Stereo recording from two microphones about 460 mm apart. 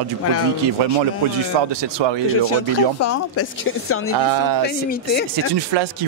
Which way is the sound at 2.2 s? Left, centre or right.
Left.